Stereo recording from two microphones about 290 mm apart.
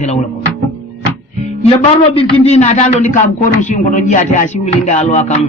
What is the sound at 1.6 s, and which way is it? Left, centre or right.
A man's voice, centre.